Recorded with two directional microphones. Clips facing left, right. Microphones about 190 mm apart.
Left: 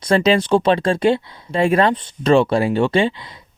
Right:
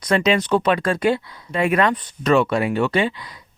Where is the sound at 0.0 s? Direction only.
30° left (ahead or behind).